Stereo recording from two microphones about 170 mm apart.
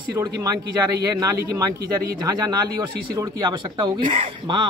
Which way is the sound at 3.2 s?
25° right (ahead or behind).